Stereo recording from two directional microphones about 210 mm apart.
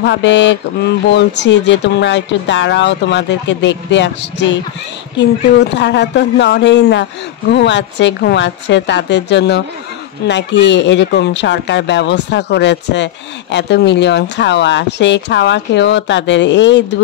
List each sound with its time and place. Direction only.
0.0 s speech: 60° left (ahead or behind)
5.6 s speech: 55° left (ahead or behind)